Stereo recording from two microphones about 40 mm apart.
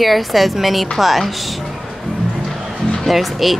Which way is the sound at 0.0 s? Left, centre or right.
Centre.